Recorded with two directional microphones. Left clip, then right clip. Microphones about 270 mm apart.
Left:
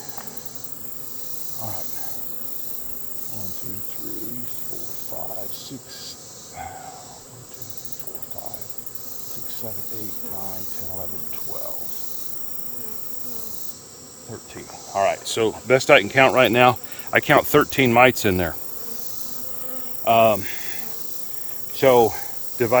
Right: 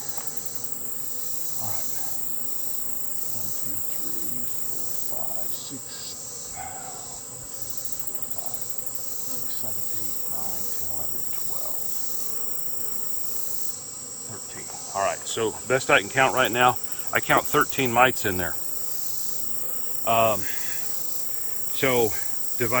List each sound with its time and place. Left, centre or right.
14.9 s speech: left
20.1 s cricket: left
21.8 s insect: centre